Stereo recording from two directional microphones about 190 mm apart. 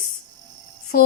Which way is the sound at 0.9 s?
50° left (ahead or behind).